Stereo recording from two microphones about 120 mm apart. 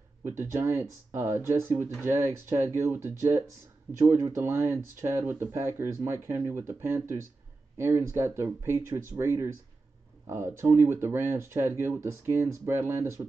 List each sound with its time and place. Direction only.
0.2 s speech: 20° right (ahead or behind)